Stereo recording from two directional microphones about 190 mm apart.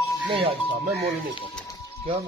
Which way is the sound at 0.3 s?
30° right (ahead or behind).